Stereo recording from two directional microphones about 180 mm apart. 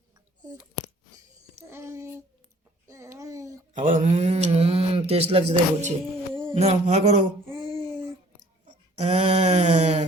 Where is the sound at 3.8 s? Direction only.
45° right (ahead or behind).